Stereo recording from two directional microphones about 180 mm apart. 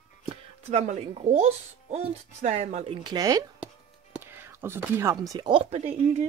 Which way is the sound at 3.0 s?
20° right (ahead or behind).